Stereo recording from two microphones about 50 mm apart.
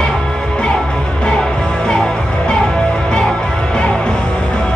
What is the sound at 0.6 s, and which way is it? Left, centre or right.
Music, centre.